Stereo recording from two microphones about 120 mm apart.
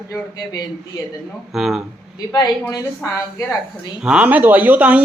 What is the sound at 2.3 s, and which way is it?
Speech, 35° left (ahead or behind).